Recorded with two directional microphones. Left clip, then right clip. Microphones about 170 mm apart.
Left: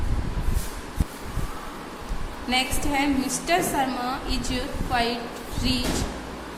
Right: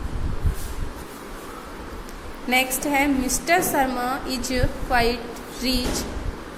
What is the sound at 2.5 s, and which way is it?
A woman's voice, 30° right (ahead or behind).